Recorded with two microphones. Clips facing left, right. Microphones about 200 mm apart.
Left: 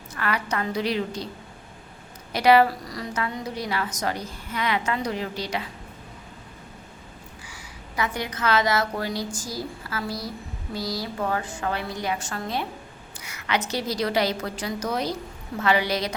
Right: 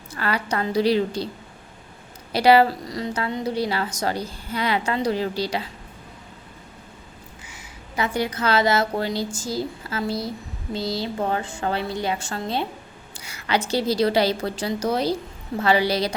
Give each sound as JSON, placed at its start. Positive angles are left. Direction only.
{"t": 0.1, "sound": "a woman's voice", "side_deg": -30}
{"t": 2.3, "sound": "a woman's voice", "side_deg": -30}
{"t": 7.4, "sound": "a woman's voice", "side_deg": -25}